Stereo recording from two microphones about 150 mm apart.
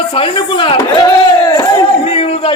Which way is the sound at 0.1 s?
35° left (ahead or behind).